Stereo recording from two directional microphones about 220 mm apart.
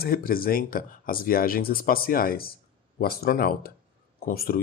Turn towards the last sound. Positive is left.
turn(degrees=40)  # may be behind; listen again after turning